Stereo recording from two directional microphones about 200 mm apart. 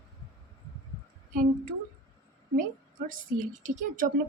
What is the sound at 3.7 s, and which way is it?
Speech, 40° right (ahead or behind).